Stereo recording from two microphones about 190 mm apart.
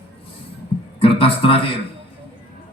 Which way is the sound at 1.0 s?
30° left (ahead or behind).